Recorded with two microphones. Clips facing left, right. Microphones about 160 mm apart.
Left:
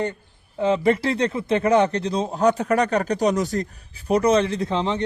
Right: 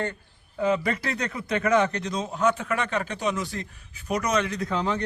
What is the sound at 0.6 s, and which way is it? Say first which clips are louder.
Speech: left 5 dB; 25° left (ahead or behind).